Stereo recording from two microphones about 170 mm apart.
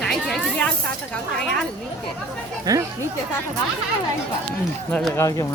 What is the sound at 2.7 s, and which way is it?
Speech, 20° right (ahead or behind).